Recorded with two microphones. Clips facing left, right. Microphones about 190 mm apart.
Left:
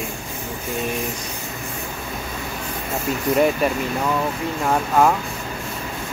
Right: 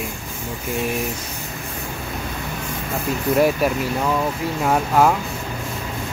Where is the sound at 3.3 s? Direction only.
5° right (ahead or behind).